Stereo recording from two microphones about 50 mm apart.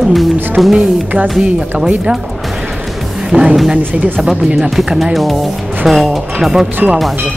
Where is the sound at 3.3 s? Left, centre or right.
Centre.